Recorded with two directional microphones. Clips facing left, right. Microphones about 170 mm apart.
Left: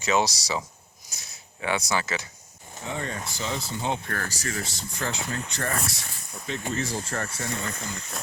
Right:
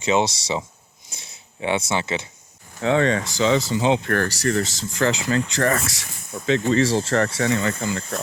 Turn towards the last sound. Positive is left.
turn(degrees=-90)